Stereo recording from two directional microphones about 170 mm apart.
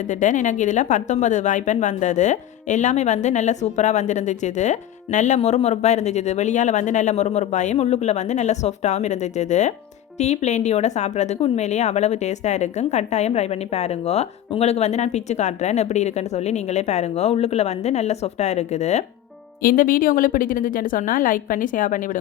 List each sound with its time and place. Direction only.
0.1 s a woman's voice: 45° left (ahead or behind)
19.6 s a woman's voice: 55° left (ahead or behind)